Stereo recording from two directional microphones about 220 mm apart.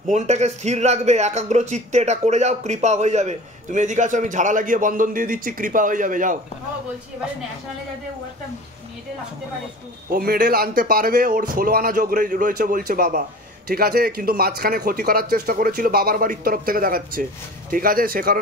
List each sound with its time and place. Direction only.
0.1 s speech: 30° right (ahead or behind)
10.1 s speech: 45° right (ahead or behind)